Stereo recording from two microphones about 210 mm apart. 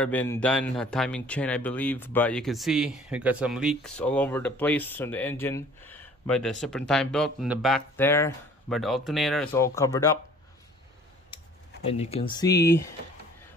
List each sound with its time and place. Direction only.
0.0 s a man's voice: 10° left (ahead or behind)
7.9 s speech: 10° left (ahead or behind)
8.6 s a man's voice: centre (ahead or behind)
9.5 s speech: 15° left (ahead or behind)
11.8 s speech: 30° left (ahead or behind); by 12.9 s 15° left (ahead or behind)